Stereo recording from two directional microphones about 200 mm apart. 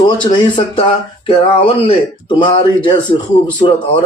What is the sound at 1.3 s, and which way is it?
Speech, 25° left (ahead or behind).